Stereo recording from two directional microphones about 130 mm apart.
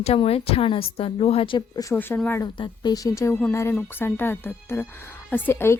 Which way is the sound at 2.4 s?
35° left (ahead or behind).